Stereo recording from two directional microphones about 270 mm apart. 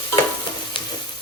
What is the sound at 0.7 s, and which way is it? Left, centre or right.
Frying, centre.